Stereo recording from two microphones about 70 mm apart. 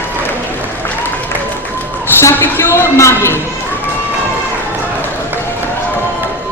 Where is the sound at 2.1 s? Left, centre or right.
Left.